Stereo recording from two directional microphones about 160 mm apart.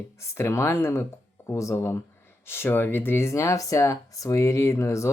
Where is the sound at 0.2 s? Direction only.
15° left (ahead or behind).